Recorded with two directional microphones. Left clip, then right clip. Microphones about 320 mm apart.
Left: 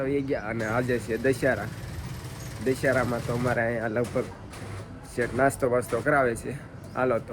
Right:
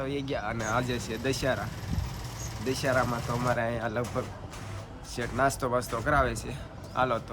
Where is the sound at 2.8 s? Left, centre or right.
Centre.